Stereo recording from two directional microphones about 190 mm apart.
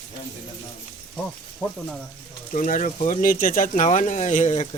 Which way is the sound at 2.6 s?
40° left (ahead or behind).